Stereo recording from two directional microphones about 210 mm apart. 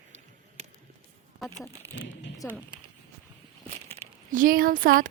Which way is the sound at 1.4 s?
Centre (ahead or behind).